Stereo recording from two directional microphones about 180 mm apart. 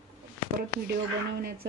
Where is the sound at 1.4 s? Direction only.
55° right (ahead or behind).